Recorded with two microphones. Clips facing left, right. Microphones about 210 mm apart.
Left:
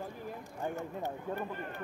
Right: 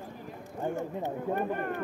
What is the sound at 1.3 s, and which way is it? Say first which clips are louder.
Speech: right 7 dB; 60° right (ahead or behind).